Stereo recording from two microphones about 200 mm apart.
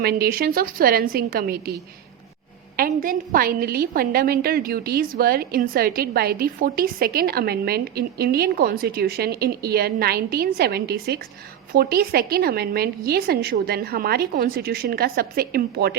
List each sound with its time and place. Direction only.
0.0 s a woman's voice: 50° right (ahead or behind)